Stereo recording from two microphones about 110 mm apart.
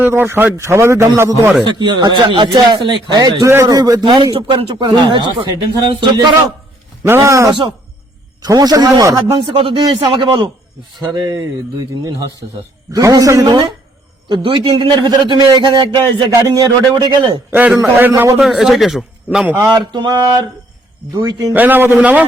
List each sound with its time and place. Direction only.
0.0 s speech: 20° right (ahead or behind)
1.6 s a man's voice: 45° right (ahead or behind)
4.0 s speech: 45° right (ahead or behind)
7.0 s a man's voice: 25° right (ahead or behind)
9.4 s speech: 50° right (ahead or behind)
12.9 s a man's voice: 35° right (ahead or behind)
17.5 s a man's voice: 15° right (ahead or behind)
18.3 s a man's voice: centre (ahead or behind)
19.5 s a man's voice: 40° right (ahead or behind)
21.5 s a man's voice: 15° right (ahead or behind)